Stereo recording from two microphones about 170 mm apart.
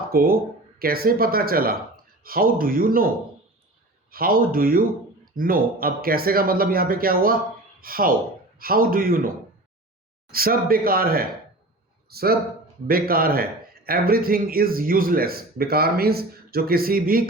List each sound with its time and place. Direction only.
0.1 s speech: 60° right (ahead or behind)
4.1 s speech: 60° right (ahead or behind)
10.3 s a man's voice: 60° right (ahead or behind)